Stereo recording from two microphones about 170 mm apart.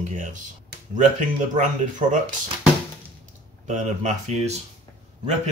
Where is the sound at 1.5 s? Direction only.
50° right (ahead or behind).